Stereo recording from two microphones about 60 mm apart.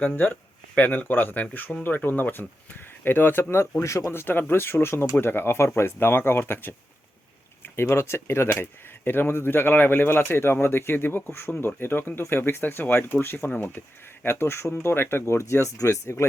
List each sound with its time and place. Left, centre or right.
0.8 s speech: left
3.8 s speech: left
4.1 s speech: left